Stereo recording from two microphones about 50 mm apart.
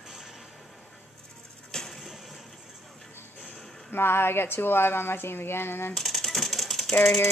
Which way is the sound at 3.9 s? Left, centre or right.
Left.